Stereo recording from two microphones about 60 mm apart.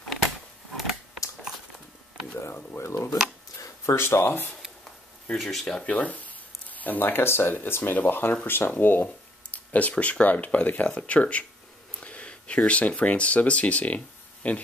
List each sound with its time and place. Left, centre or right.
0.7 s a sound: centre
2.8 s speech: left
5.3 s speech: centre
5.8 s speech: left